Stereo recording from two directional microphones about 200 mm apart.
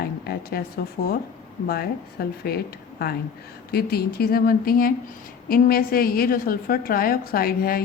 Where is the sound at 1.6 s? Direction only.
50° left (ahead or behind).